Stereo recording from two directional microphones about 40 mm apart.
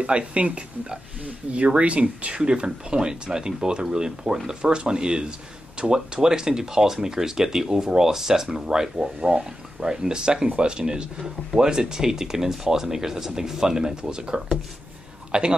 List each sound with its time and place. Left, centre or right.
0.0 s speech: right